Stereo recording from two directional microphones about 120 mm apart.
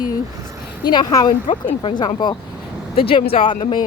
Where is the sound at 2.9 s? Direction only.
50° left (ahead or behind).